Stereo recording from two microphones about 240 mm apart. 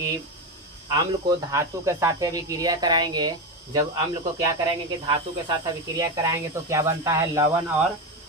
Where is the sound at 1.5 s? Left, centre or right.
Centre.